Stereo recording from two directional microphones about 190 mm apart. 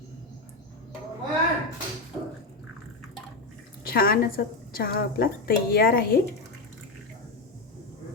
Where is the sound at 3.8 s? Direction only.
50° left (ahead or behind).